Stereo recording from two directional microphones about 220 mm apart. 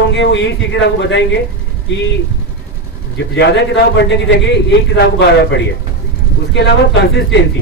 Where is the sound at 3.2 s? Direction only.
50° left (ahead or behind).